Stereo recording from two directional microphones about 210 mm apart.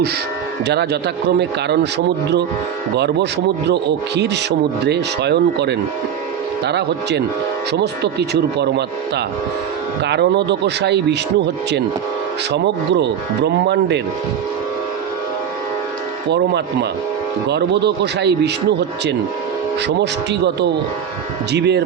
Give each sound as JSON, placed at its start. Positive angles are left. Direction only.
{"t": 0.6, "sound": "speech", "side_deg": -55}
{"t": 2.9, "sound": "speech", "side_deg": -55}
{"t": 12.5, "sound": "speech", "side_deg": -55}
{"t": 16.3, "sound": "speech", "side_deg": -55}